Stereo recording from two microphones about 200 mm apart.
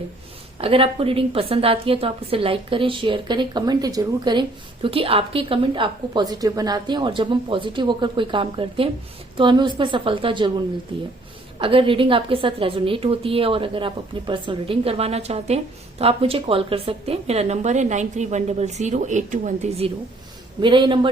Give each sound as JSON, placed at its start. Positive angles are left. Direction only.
{"t": 0.6, "sound": "a woman's voice", "side_deg": -30}
{"t": 11.6, "sound": "a woman's voice", "side_deg": -25}